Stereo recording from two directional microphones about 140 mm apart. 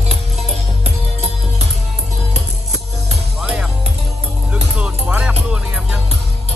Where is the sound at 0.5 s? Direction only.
50° right (ahead or behind).